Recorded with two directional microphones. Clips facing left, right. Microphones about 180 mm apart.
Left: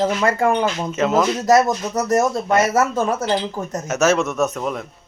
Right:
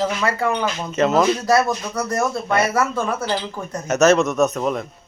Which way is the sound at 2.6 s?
45° left (ahead or behind).